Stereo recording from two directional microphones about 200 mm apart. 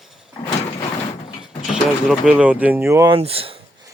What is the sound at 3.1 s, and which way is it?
Speech, 30° right (ahead or behind).